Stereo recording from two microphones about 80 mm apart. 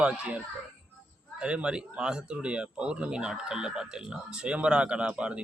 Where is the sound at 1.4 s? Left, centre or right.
Centre.